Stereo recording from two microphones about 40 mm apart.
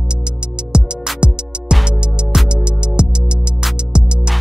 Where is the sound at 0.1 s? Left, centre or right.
Right.